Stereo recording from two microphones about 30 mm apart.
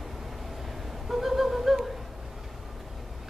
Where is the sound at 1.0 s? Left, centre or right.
Centre.